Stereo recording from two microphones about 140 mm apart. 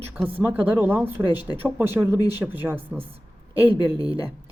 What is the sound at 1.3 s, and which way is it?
Speech, 30° left (ahead or behind).